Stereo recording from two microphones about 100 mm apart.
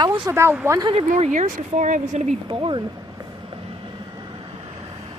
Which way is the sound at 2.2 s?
60° right (ahead or behind).